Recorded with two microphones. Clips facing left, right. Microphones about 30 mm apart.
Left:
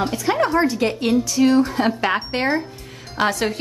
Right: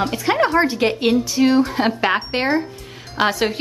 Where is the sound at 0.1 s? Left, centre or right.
Right.